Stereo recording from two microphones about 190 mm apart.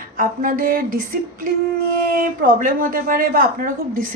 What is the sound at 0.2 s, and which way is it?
Speech, 50° right (ahead or behind).